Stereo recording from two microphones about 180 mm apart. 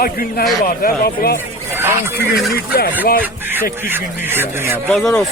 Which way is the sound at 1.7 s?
15° right (ahead or behind).